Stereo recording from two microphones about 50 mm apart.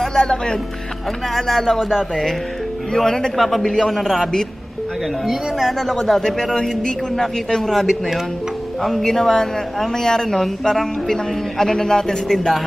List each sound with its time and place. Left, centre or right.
0.0 s speech: centre
1.3 s a man's voice: centre
2.9 s a man's voice: centre
12.3 s a man's voice: centre